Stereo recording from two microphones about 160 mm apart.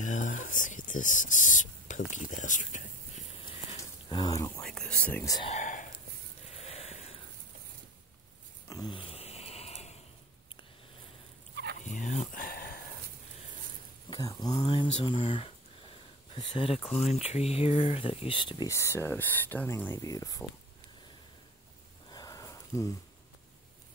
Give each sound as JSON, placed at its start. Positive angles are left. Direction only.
{"t": 0.0, "sound": "a sound", "side_deg": 50}
{"t": 3.4, "sound": "a sound", "side_deg": 30}
{"t": 4.6, "sound": "speech", "side_deg": 5}
{"t": 5.2, "sound": "speech", "side_deg": 25}
{"t": 5.5, "sound": "whispering", "side_deg": 50}
{"t": 6.4, "sound": "a sound", "side_deg": 40}
{"t": 8.6, "sound": "snoring", "side_deg": 25}
{"t": 11.8, "sound": "dog", "side_deg": 50}
{"t": 14.1, "sound": "speech", "side_deg": 25}
{"t": 18.7, "sound": "speech", "side_deg": 15}
{"t": 22.1, "sound": "sniff", "side_deg": 20}